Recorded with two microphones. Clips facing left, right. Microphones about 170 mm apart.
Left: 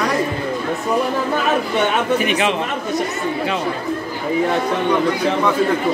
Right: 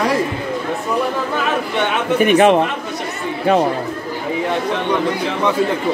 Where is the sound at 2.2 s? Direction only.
50° right (ahead or behind).